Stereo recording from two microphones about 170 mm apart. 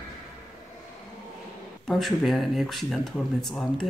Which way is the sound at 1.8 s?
Centre (ahead or behind).